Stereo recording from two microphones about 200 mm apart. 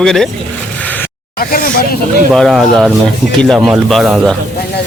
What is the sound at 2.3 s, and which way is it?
A man's voice, centre (ahead or behind).